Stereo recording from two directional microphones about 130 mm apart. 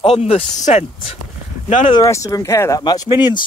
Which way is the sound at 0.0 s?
50° left (ahead or behind).